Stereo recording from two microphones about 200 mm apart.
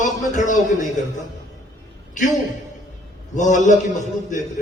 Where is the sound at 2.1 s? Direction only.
40° left (ahead or behind).